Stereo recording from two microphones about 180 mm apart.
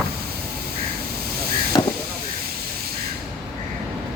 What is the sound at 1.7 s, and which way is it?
Vehicle, 25° left (ahead or behind).